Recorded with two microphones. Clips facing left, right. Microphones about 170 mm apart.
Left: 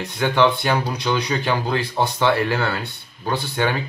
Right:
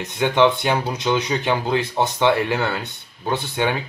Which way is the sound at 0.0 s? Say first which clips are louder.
Right 1 dB; 20° right (ahead or behind).